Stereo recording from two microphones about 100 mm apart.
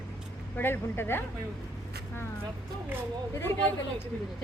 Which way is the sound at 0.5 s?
20° left (ahead or behind).